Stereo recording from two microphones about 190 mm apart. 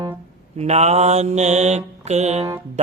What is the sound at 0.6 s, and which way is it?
Mantra, 35° right (ahead or behind).